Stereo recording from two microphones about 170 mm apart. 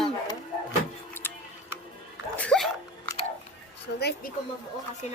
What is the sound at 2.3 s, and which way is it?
Sneeze, 5° left (ahead or behind).